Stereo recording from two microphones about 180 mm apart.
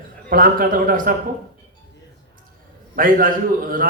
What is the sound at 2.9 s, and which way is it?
Speech, 50° right (ahead or behind).